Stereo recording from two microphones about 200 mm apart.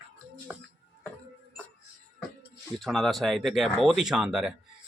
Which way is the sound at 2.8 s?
Centre (ahead or behind).